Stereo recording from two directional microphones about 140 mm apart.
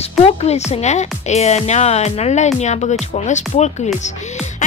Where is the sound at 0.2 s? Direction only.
50° left (ahead or behind).